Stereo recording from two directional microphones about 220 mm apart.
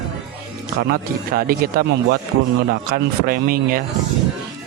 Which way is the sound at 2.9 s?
40° right (ahead or behind).